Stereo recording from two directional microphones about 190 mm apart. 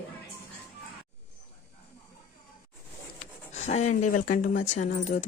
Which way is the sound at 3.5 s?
35° left (ahead or behind).